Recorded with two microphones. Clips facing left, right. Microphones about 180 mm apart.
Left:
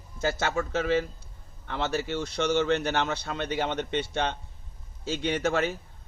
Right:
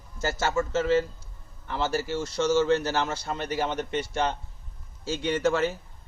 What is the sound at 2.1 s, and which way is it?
A man's voice, 65° left (ahead or behind).